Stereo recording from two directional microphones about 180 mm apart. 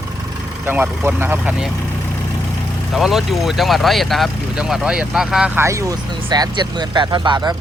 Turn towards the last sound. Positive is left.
turn(degrees=-25)  # may be behind; listen again after turning